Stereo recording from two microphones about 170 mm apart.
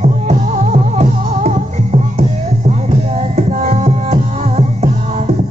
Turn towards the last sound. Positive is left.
turn(degrees=-40)  # may be behind; listen again after turning